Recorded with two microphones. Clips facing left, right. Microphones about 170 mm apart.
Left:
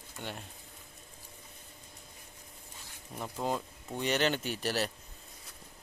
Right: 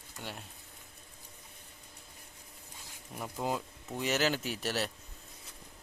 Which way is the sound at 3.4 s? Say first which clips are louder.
Left 1 dB; 10° right (ahead or behind).